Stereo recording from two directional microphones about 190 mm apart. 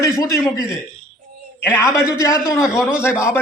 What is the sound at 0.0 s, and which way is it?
A man's voice, 15° left (ahead or behind).